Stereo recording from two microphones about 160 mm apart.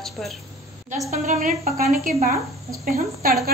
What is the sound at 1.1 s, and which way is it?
A woman's voice, 50° right (ahead or behind).